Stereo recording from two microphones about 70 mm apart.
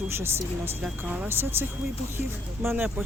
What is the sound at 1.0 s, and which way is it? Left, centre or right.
Speech, right.